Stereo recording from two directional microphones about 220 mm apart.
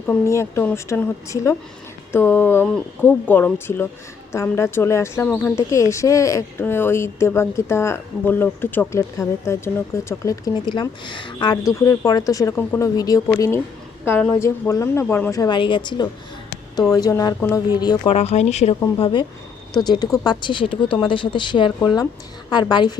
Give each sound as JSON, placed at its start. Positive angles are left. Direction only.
{"t": 0.1, "sound": "a woman's voice", "side_deg": 10}
{"t": 18.1, "sound": "a woman's voice", "side_deg": 30}